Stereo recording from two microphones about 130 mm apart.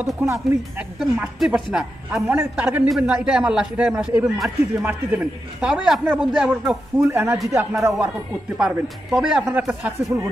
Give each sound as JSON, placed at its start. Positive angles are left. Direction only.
{"t": 0.0, "sound": "a man's voice", "side_deg": -20}
{"t": 0.9, "sound": "a woman's voice", "side_deg": -5}
{"t": 7.1, "sound": "a man's voice", "side_deg": -15}
{"t": 8.5, "sound": "a woman's voice", "side_deg": -5}